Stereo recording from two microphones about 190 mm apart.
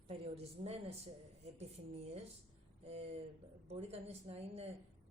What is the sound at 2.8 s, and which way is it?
A woman's voice, 35° right (ahead or behind).